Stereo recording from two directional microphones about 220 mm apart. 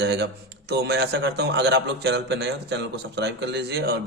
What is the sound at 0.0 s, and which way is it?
A man's voice, 50° right (ahead or behind).